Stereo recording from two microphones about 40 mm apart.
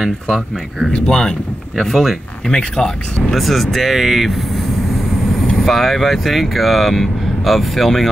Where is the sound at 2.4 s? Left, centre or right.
Centre.